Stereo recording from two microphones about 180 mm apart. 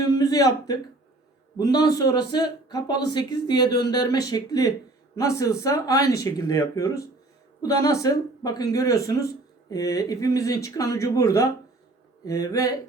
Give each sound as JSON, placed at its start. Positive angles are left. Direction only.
{"t": 0.0, "sound": "speech", "side_deg": 20}